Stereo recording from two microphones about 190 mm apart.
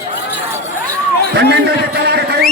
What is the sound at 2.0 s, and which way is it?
Music, 55° right (ahead or behind).